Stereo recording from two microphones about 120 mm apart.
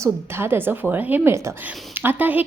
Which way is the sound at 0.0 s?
20° right (ahead or behind).